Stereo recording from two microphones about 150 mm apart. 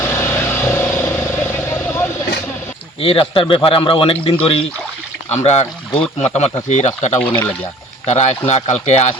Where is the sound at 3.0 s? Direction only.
40° left (ahead or behind).